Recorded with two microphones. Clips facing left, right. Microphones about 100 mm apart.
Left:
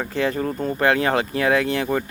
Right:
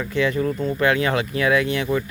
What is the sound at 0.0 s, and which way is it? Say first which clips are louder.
Speech: right 1 dB; 35° left (ahead or behind).